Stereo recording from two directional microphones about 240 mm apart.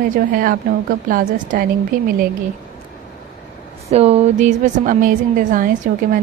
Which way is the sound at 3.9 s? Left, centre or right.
Right.